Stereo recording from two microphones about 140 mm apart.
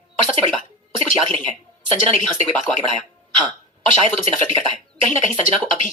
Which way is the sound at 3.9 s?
45° right (ahead or behind).